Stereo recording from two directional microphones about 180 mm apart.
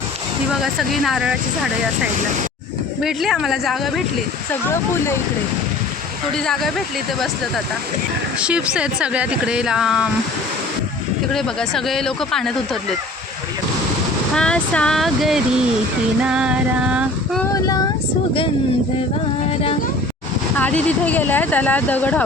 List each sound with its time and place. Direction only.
0.6 s speech: centre (ahead or behind)
3.0 s speech: centre (ahead or behind)
6.3 s speech: 5° left (ahead or behind)
11.3 s speech: centre (ahead or behind)
14.3 s speech: 5° left (ahead or behind)
17.4 s speech: 20° left (ahead or behind)
20.6 s speech: 10° left (ahead or behind)